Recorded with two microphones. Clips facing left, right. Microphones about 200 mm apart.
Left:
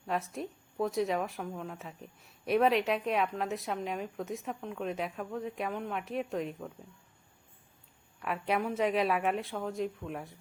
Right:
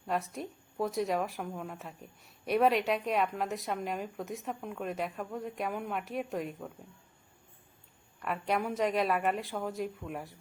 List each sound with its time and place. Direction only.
0.1 s a woman's voice: centre (ahead or behind)
8.2 s a woman's voice: centre (ahead or behind)